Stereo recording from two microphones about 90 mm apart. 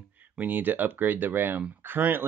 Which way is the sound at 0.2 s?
20° right (ahead or behind).